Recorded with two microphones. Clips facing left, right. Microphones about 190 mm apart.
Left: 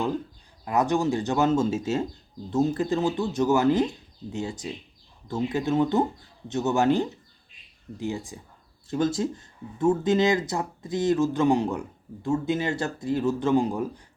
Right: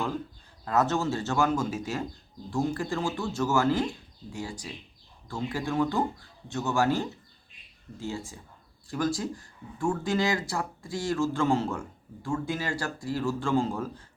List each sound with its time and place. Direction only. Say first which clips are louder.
0.6 s speech: left 3 dB; 15° left (ahead or behind)